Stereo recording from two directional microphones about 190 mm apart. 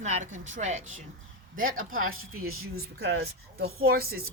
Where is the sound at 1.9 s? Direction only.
90° right.